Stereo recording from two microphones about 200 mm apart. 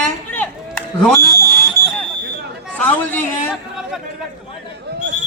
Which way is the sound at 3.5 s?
Centre (ahead or behind).